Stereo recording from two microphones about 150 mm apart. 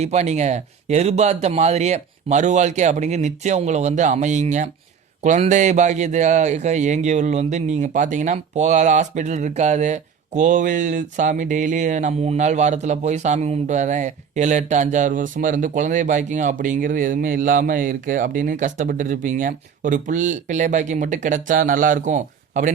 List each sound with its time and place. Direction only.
0.0 s a man's voice: 50° right (ahead or behind)